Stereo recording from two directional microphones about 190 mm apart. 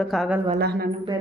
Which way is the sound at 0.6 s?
55° right (ahead or behind).